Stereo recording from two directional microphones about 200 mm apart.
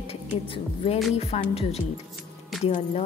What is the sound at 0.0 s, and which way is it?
A woman's voice, 30° left (ahead or behind).